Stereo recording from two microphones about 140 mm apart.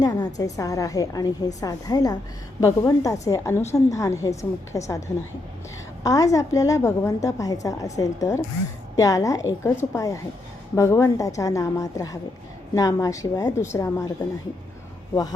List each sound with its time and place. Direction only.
0.0 s a woman's voice: 25° left (ahead or behind)